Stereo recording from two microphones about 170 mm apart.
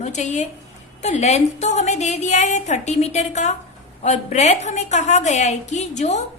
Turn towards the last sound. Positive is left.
turn(degrees=40)  # may be behind; listen again after turning